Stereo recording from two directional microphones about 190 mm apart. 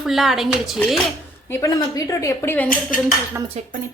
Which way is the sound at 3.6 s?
35° right (ahead or behind).